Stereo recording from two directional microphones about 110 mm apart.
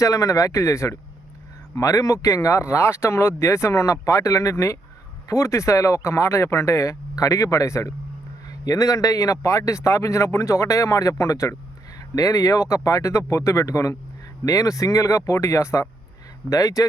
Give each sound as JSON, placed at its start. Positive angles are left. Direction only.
{"t": 0.0, "sound": "speech", "side_deg": 30}